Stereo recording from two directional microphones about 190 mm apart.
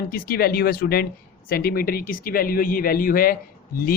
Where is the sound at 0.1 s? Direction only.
55° left (ahead or behind).